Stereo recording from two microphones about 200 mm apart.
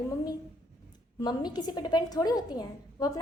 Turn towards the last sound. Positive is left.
turn(degrees=20)  # may be behind; listen again after turning